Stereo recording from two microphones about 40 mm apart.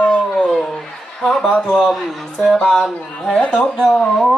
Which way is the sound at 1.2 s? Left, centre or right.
Centre.